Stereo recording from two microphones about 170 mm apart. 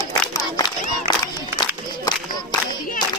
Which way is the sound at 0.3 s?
25° left (ahead or behind).